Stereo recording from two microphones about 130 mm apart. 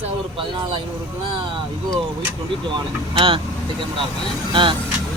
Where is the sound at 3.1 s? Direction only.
45° right (ahead or behind).